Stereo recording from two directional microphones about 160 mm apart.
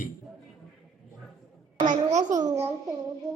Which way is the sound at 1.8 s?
50° right (ahead or behind).